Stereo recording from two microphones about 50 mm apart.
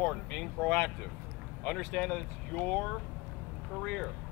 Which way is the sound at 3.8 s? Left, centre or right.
Centre.